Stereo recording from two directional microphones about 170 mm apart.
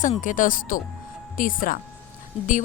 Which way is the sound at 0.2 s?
50° left (ahead or behind).